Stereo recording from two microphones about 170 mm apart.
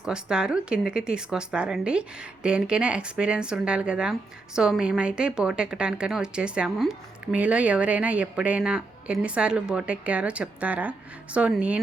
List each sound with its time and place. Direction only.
0.0 s speech: 5° right (ahead or behind)